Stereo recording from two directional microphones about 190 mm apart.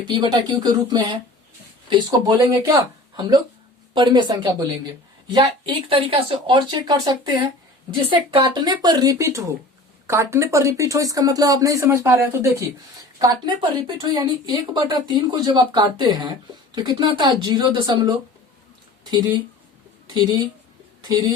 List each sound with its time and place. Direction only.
0.1 s speech: 20° right (ahead or behind)